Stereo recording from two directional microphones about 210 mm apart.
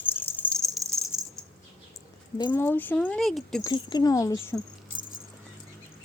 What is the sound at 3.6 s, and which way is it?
Speech, 20° left (ahead or behind).